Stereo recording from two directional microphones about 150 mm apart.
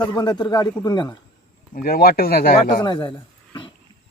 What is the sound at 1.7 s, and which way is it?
Speech, 80° left.